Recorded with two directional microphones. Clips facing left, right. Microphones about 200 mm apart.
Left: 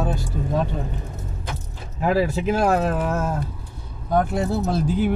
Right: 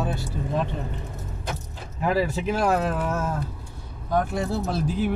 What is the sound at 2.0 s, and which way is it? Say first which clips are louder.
Speech: left 3 dB; 50° left (ahead or behind).